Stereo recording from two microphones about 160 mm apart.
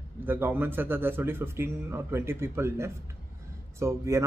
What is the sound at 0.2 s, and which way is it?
Speech, 10° right (ahead or behind).